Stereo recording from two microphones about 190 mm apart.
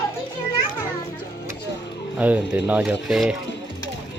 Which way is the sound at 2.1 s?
10° right (ahead or behind).